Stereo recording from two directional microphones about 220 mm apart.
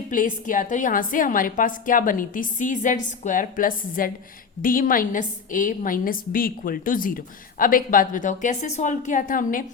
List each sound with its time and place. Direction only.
0.1 s a woman's voice: 35° left (ahead or behind)